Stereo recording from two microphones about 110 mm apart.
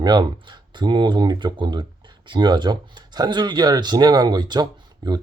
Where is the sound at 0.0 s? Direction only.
40° right (ahead or behind).